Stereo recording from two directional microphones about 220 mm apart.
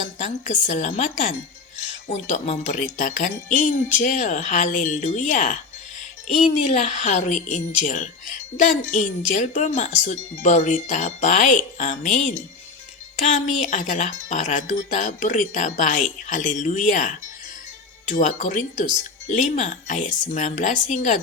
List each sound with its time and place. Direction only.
0.0 s speech: 35° left (ahead or behind)
18.1 s speech: 35° left (ahead or behind)